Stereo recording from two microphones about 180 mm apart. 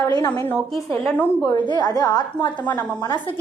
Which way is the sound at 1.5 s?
25° left (ahead or behind).